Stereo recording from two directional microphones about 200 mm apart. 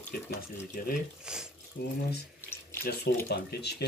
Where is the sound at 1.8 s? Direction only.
55° left (ahead or behind).